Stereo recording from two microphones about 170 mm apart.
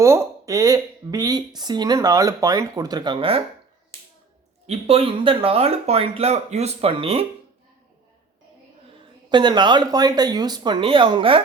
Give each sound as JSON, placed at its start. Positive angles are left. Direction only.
{"t": 0.0, "sound": "speech", "side_deg": -15}
{"t": 4.6, "sound": "speech", "side_deg": -35}
{"t": 9.3, "sound": "speech", "side_deg": -25}